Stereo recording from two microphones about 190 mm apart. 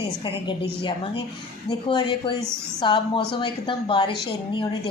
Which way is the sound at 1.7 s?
25° left (ahead or behind).